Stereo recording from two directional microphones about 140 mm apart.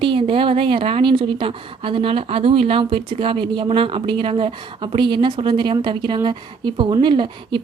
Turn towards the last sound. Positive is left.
turn(degrees=-35)  # may be behind; listen again after turning